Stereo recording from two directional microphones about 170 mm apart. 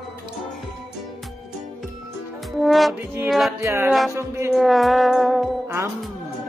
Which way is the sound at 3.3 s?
Centre (ahead or behind).